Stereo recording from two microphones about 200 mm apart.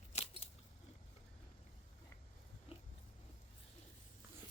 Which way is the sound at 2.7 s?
30° left (ahead or behind).